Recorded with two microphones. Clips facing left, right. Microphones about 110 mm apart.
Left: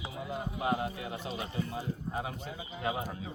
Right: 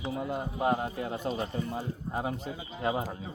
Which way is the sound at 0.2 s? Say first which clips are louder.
Right 3 dB; 50° right (ahead or behind).